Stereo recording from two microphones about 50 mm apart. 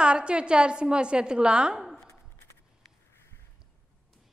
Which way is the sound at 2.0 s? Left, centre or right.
Left.